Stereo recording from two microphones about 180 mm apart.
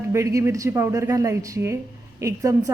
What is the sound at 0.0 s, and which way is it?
Speech, 15° right (ahead or behind).